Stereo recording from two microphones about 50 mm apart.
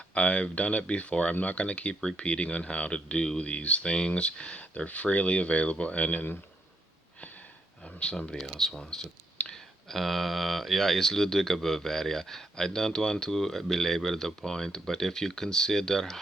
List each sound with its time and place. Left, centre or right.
0.1 s speech: left
7.9 s speech: centre
8.4 s speech: centre
8.8 s speech: centre
9.5 s speech: centre